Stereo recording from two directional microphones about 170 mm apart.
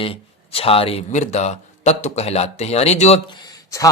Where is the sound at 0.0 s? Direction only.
35° left (ahead or behind).